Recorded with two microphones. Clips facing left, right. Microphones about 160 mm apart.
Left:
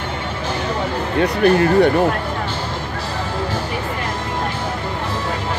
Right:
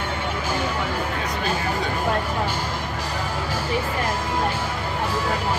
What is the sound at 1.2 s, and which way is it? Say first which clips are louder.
Speech: left 11 dB; 65° left (ahead or behind).